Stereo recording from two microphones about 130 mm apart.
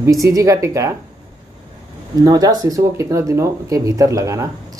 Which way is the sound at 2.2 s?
30° right (ahead or behind).